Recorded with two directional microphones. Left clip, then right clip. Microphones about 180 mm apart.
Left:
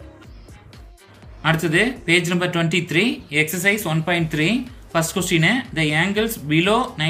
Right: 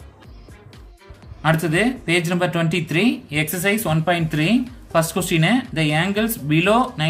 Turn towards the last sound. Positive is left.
turn(degrees=-45)  # may be behind; listen again after turning